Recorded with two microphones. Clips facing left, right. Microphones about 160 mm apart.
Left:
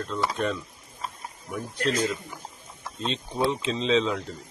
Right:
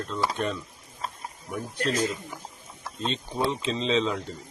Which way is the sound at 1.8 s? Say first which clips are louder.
Left 1 dB; centre (ahead or behind).